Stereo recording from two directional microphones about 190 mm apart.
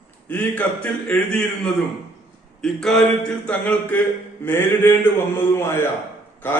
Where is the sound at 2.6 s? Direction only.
5° left (ahead or behind).